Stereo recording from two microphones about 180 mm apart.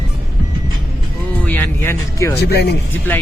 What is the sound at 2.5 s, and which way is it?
Speech, 65° left (ahead or behind).